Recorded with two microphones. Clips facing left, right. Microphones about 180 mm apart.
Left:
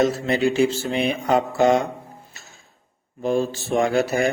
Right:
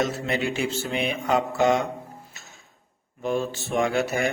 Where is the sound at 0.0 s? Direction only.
35° left (ahead or behind).